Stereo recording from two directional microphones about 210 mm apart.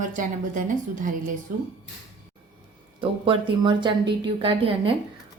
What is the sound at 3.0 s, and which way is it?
Speech, 25° right (ahead or behind).